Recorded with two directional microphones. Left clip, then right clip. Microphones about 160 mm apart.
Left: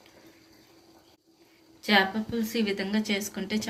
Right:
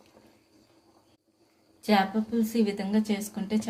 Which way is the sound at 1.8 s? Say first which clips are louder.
Left 2 dB; 45° right (ahead or behind).